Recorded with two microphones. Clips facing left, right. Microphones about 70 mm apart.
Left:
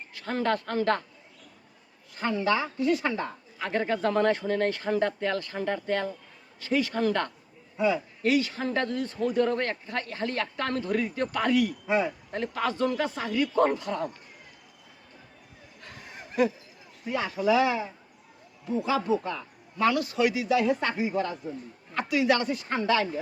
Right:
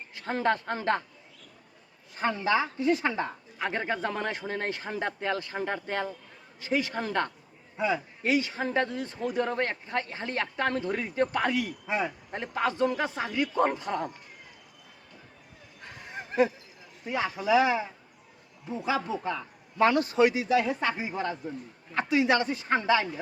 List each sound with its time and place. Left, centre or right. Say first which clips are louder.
0.1 s a man's voice: even; right
2.1 s a man's voice: even; right
16.2 s a sound: right 10 dB; right
17.1 s a man's voice: left 1 dB; right
18.9 s a man's voice: left 1 dB; right
19.8 s speech: right 2 dB; right
20.7 s speech: left 2 dB; centre
20.9 s a man's voice: left 4 dB; right